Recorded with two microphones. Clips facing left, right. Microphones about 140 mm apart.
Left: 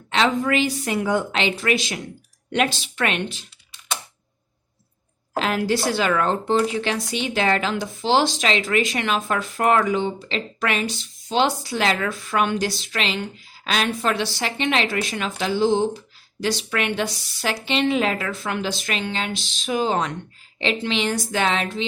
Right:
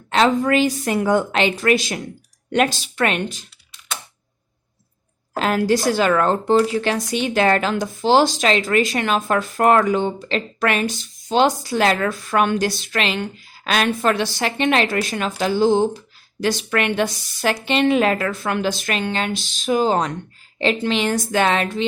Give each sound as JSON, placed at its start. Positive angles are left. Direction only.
{"t": 0.1, "sound": "speech", "side_deg": -45}
{"t": 5.4, "sound": "speech", "side_deg": -45}